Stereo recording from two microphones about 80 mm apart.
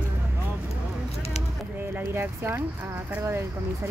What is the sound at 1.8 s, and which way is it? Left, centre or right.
Speech, right.